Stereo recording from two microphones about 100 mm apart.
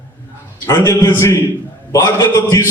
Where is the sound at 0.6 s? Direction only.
35° left (ahead or behind).